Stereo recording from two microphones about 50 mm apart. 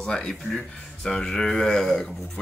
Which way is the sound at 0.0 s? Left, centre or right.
Centre.